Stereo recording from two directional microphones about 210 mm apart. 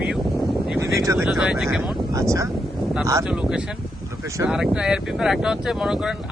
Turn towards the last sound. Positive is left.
turn(degrees=-5)  # may be behind; listen again after turning